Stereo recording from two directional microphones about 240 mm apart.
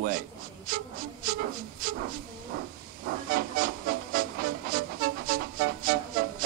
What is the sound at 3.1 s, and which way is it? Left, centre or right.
Music, right.